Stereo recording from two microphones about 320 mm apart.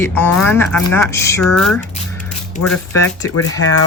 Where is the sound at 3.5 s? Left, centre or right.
Left.